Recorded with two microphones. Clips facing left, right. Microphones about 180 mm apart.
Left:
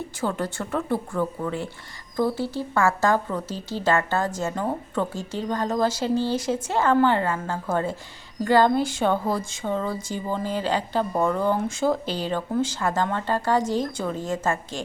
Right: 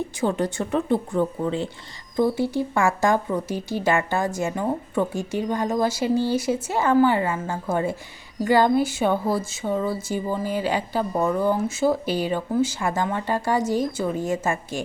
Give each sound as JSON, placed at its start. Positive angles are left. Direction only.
{"t": 0.2, "sound": "speech", "side_deg": -20}